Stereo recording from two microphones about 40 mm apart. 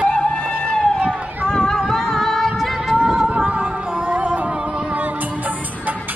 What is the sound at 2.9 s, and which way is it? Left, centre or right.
Yodeling, centre.